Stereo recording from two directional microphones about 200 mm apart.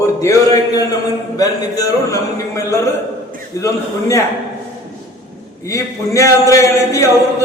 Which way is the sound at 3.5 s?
15° left (ahead or behind).